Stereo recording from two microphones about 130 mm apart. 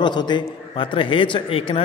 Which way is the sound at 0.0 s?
35° left (ahead or behind).